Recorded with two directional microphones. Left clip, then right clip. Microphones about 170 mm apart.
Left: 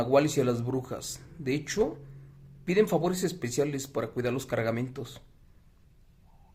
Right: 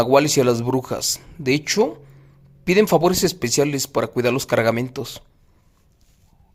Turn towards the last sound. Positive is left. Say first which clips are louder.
# right 11 dB
turn(degrees=-35)  # may be behind; listen again after turning